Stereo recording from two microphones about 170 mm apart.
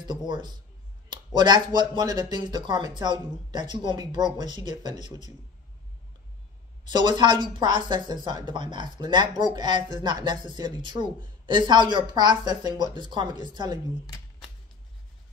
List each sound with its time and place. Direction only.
0.0 s a woman's voice: 25° right (ahead or behind)
6.8 s a woman's voice: 25° right (ahead or behind)